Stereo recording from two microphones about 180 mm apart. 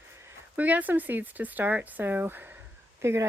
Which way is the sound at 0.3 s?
10° right (ahead or behind).